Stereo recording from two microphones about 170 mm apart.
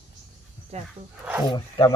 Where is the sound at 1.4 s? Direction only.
25° left (ahead or behind).